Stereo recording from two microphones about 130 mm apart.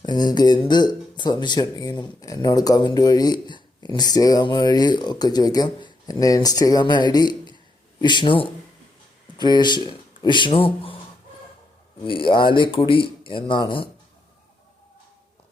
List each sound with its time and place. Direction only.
0.0 s speech: 35° left (ahead or behind)
12.0 s speech: 40° left (ahead or behind)